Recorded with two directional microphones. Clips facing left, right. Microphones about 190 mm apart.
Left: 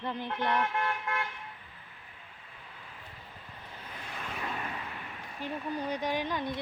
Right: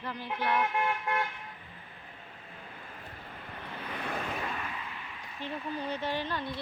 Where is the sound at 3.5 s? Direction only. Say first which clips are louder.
Right 7 dB; 70° right (ahead or behind).